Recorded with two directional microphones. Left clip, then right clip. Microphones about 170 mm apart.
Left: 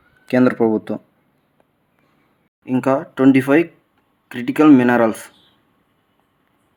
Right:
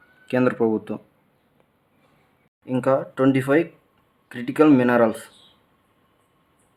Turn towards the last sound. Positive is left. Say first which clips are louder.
# left 3 dB
turn(degrees=15)  # may be behind; listen again after turning